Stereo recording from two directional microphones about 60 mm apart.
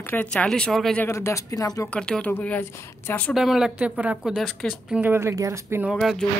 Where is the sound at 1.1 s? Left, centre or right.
Left.